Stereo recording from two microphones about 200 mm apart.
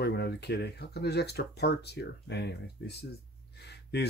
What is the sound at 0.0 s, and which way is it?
Speech, 55° left (ahead or behind).